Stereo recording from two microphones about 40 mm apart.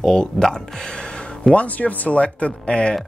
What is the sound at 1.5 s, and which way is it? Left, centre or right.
Speech, left.